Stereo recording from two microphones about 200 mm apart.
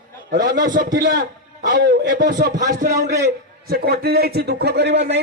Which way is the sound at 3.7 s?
50° right (ahead or behind).